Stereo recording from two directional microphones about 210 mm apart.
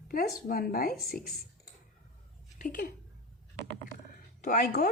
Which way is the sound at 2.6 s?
40° left (ahead or behind).